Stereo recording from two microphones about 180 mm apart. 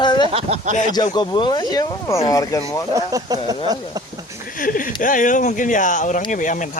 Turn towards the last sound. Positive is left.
turn(degrees=45)  # may be behind; listen again after turning